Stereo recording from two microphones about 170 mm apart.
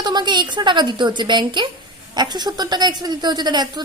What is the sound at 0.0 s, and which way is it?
Speech, 25° right (ahead or behind).